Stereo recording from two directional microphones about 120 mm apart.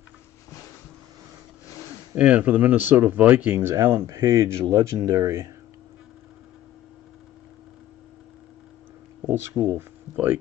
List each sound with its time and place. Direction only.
2.1 s speech: 10° right (ahead or behind)
3.9 s speech: 30° right (ahead or behind)
9.2 s speech: 20° right (ahead or behind)